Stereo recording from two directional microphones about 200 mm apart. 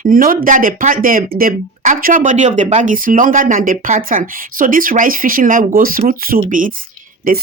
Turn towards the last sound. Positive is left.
turn(degrees=-45)  # may be behind; listen again after turning